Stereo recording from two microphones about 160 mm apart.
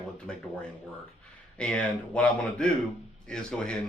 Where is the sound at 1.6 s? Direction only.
5° left (ahead or behind).